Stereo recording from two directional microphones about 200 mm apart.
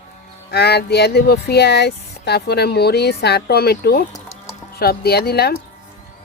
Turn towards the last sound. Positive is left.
turn(degrees=50)  # may be behind; listen again after turning